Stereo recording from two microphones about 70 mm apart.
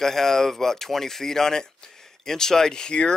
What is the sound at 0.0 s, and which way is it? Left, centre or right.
Speech, centre.